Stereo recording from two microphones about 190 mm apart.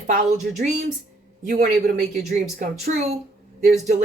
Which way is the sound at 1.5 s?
40° right (ahead or behind).